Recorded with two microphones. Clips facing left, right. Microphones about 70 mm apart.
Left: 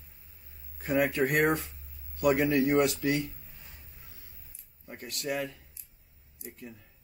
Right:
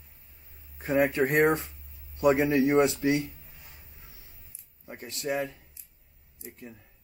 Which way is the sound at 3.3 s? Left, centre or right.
Centre.